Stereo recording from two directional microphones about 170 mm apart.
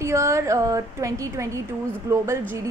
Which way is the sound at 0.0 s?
15° right (ahead or behind).